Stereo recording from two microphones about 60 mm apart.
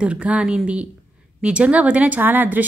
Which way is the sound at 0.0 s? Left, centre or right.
Centre.